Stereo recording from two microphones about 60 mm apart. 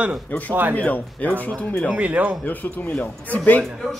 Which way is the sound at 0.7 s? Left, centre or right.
Left.